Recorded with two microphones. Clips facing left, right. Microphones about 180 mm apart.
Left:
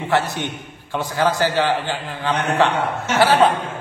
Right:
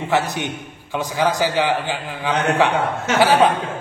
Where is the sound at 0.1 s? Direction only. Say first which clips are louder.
Even; 15° right (ahead or behind).